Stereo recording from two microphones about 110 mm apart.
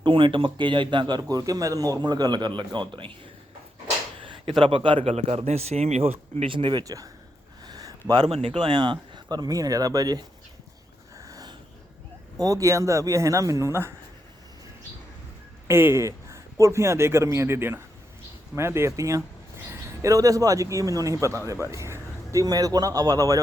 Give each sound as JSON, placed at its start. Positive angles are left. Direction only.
{"t": 0.0, "sound": "speech", "side_deg": -50}
{"t": 4.2, "sound": "a sound", "side_deg": -50}
{"t": 4.6, "sound": "speech", "side_deg": -50}
{"t": 5.0, "sound": "speech", "side_deg": -70}
{"t": 6.8, "sound": "speech", "side_deg": -35}
{"t": 7.6, "sound": "a sound", "side_deg": -35}
{"t": 8.2, "sound": "speech", "side_deg": -65}
{"t": 8.5, "sound": "speech", "side_deg": -45}
{"t": 11.2, "sound": "a sound", "side_deg": -30}
{"t": 12.4, "sound": "speech", "side_deg": -30}
{"t": 15.6, "sound": "a man's voice", "side_deg": -20}